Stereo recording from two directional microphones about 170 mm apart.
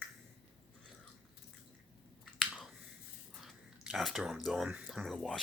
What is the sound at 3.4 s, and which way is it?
Speech, centre (ahead or behind).